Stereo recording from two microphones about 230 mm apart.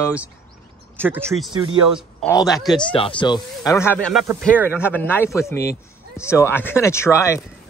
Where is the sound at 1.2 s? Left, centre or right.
Centre.